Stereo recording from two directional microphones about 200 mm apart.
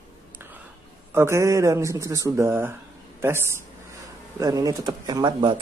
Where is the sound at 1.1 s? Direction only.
15° right (ahead or behind).